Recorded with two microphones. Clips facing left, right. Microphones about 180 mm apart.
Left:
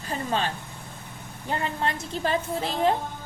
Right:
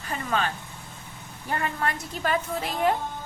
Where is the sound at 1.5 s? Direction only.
25° left (ahead or behind).